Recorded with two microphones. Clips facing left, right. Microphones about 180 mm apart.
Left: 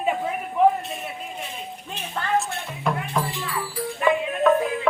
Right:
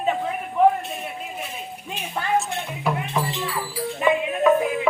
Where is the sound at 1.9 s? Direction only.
10° right (ahead or behind).